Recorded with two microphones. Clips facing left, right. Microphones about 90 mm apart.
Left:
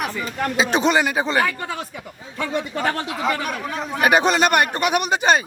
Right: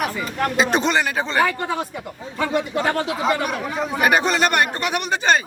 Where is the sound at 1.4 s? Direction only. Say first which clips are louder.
Right 2 dB; 25° right (ahead or behind).